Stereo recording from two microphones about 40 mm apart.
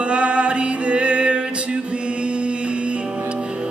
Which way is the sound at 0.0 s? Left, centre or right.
Right.